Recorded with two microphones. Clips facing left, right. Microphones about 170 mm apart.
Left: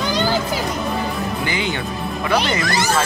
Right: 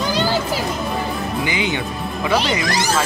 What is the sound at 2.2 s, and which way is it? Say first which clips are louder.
Speech: right 1 dB; centre (ahead or behind).